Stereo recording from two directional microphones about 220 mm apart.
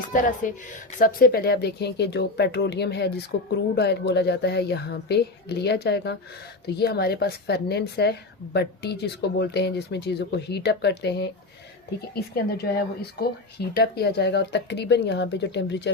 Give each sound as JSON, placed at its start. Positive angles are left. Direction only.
{"t": 0.1, "sound": "speech", "side_deg": 35}